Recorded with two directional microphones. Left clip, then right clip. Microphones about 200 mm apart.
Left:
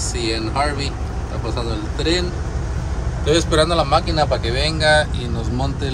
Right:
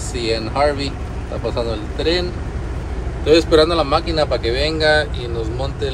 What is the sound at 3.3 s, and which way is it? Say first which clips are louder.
Speech: right 4 dB; 15° left (ahead or behind).